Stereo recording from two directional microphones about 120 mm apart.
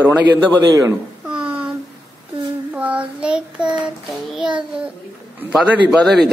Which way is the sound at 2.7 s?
10° right (ahead or behind).